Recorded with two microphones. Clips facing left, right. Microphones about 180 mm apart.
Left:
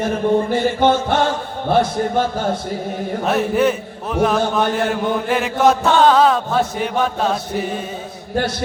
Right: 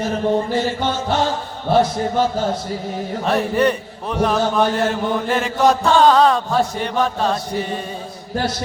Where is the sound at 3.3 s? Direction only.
5° left (ahead or behind).